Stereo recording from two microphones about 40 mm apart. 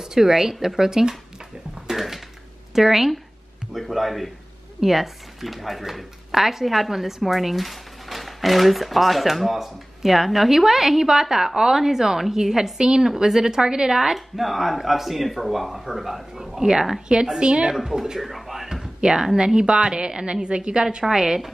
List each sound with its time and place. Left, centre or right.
0.0 s a woman's voice: centre
1.9 s a sound: centre
2.7 s a woman's voice: centre
14.1 s speech: centre
17.1 s a woman's voice: centre
17.7 s a woman's voice: centre
18.9 s a woman's voice: right